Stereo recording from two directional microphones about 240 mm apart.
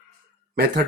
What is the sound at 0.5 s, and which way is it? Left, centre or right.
Speech, right.